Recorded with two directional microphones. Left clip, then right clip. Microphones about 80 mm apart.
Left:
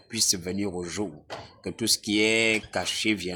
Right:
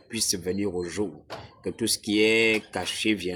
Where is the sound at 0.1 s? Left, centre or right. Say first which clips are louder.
Left 1 dB; left.